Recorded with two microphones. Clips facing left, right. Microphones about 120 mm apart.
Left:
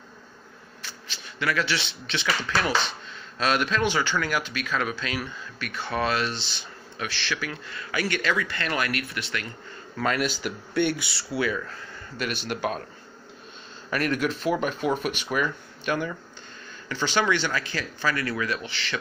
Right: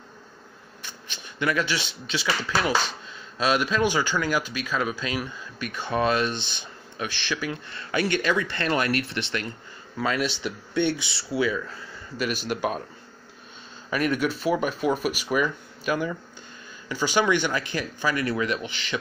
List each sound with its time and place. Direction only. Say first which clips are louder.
1.4 s speech: right 1 dB; 20° right (ahead or behind)
10.0 s speech: even; centre (ahead or behind)
10.8 s speech: even; 25° right (ahead or behind)
11.5 s speech: right 1 dB; 5° right (ahead or behind)
13.8 s speech: right 1 dB; 5° right (ahead or behind)